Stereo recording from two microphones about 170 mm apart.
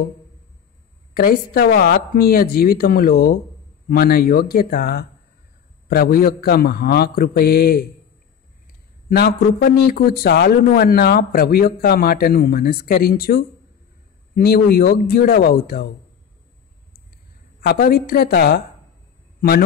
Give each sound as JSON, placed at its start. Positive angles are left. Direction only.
{"t": 1.1, "sound": "speech", "side_deg": 60}
{"t": 9.1, "sound": "a man's voice", "side_deg": 75}
{"t": 9.7, "sound": "speech", "side_deg": 60}
{"t": 17.6, "sound": "speech", "side_deg": 65}